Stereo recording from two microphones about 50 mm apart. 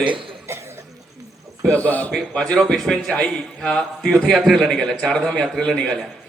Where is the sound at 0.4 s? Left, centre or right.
Right.